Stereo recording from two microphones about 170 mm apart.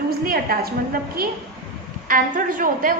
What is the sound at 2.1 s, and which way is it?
Speech, 55° right (ahead or behind).